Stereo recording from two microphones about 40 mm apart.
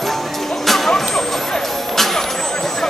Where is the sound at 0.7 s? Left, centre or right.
Centre.